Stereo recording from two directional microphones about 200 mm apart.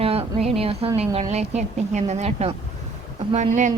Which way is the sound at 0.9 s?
30° right (ahead or behind).